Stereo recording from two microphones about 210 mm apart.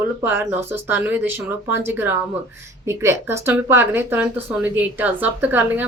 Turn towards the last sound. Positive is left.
turn(degrees=-10)  # may be behind; listen again after turning